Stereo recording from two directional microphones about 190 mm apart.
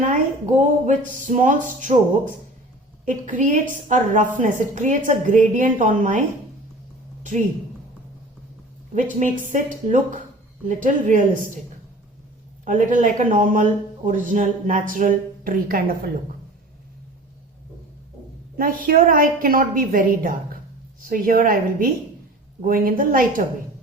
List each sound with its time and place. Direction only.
0.0 s a man's voice: 40° right (ahead or behind)
9.5 s a man's voice: 45° right (ahead or behind)
12.6 s a man's voice: 45° right (ahead or behind)
18.9 s a man's voice: 45° right (ahead or behind)